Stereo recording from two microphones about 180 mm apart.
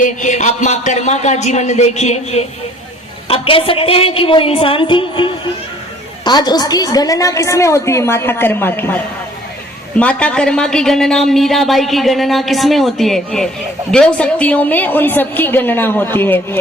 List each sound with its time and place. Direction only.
0.0 s a man's voice: 45° left (ahead or behind); by 9.0 s 10° left (ahead or behind)
10.0 s a woman's voice: 5° left (ahead or behind)